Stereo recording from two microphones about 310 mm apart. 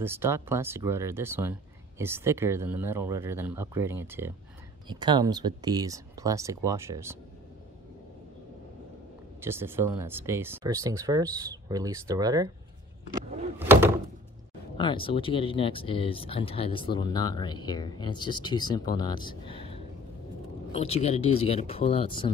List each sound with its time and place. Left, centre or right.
0.0 s speech: centre
9.4 s speech: centre
13.6 s door: centre
14.8 s speech: centre